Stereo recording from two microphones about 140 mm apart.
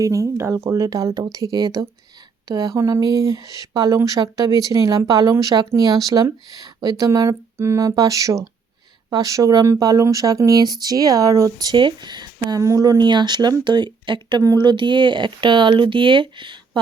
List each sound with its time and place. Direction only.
0.0 s speech: 25° right (ahead or behind)